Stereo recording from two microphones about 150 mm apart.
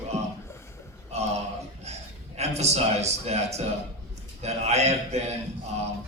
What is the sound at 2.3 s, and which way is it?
A man's voice, 45° right (ahead or behind).